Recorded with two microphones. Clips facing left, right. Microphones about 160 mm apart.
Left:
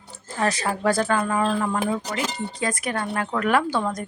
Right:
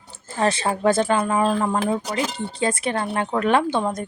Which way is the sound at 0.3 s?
25° right (ahead or behind).